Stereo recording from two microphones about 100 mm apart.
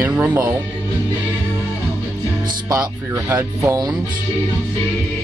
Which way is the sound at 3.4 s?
35° right (ahead or behind).